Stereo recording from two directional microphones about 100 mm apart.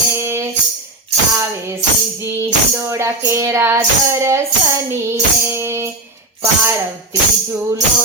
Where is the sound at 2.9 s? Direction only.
30° right (ahead or behind).